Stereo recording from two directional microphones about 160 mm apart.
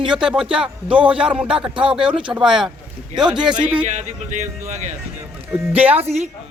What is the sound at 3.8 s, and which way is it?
Speech, 45° right (ahead or behind).